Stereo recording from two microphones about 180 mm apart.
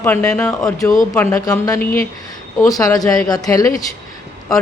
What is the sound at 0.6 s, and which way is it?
A woman's voice, 20° left (ahead or behind).